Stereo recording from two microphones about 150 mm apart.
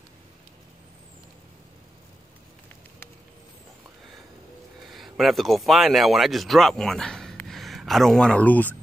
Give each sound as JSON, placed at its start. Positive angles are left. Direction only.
{"t": 4.9, "sound": "speech", "side_deg": 0}